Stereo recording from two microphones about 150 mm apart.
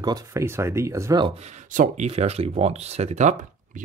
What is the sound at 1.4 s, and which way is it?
Speech, 50° right (ahead or behind).